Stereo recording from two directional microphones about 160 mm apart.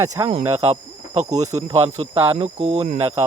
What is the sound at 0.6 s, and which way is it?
Speech, 40° right (ahead or behind).